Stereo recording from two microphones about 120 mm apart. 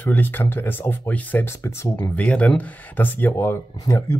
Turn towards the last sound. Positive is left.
turn(degrees=25)  # may be behind; listen again after turning